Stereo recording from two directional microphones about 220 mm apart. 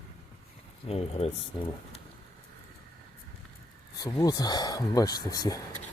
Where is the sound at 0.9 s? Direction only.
25° left (ahead or behind).